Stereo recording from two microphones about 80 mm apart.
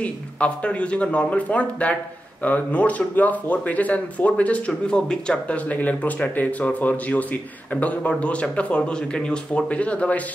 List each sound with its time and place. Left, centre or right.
0.0 s speech: centre